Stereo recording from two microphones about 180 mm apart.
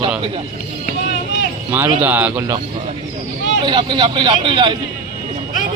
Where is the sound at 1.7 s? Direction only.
10° right (ahead or behind).